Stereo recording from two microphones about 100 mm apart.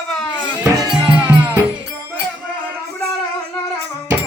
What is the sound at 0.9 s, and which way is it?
Music, 10° right (ahead or behind).